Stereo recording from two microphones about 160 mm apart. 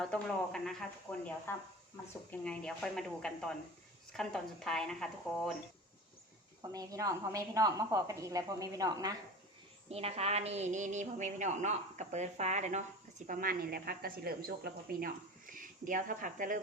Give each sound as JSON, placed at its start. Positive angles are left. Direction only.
{"t": 0.0, "sound": "speech", "side_deg": 5}
{"t": 6.6, "sound": "a woman's voice", "side_deg": -20}
{"t": 9.9, "sound": "a woman's voice", "side_deg": -40}